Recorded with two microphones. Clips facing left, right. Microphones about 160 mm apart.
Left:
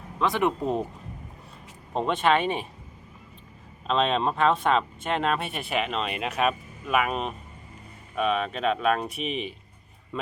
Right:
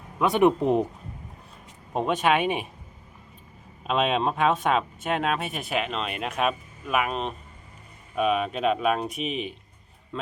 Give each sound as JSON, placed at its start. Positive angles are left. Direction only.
{"t": 0.2, "sound": "speech", "side_deg": -15}
{"t": 1.9, "sound": "speech", "side_deg": -10}
{"t": 3.8, "sound": "speech", "side_deg": -10}